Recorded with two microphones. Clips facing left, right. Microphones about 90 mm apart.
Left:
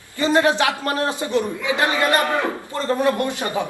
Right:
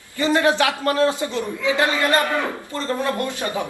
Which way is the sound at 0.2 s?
20° left (ahead or behind).